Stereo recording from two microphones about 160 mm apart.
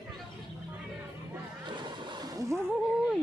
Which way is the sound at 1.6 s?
30° right (ahead or behind).